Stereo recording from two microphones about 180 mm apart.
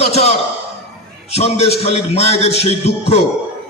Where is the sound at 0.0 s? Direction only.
35° left (ahead or behind).